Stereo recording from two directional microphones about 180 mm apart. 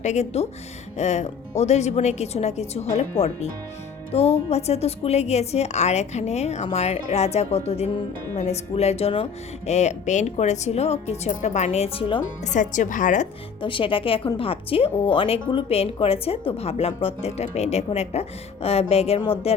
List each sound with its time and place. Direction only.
0.0 s speech: 40° left (ahead or behind)
12.5 s speech: 45° left (ahead or behind)
13.6 s speech: 30° left (ahead or behind)